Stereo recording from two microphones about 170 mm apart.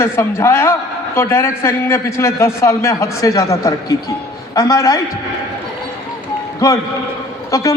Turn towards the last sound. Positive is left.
turn(degrees=20)  # may be behind; listen again after turning